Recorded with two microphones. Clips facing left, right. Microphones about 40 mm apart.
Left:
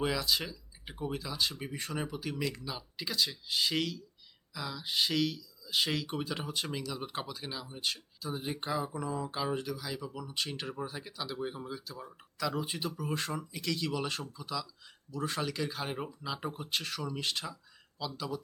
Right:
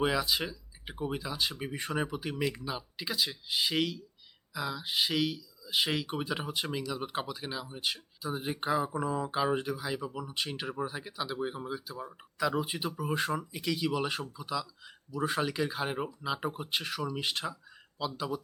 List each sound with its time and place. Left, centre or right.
0.0 s speech: centre